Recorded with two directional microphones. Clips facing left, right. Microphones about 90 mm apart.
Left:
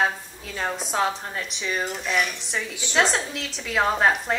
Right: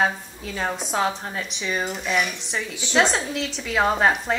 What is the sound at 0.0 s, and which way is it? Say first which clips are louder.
Speech: right 2 dB; centre (ahead or behind).